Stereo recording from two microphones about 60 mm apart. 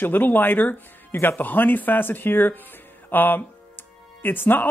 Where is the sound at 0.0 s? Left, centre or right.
Left.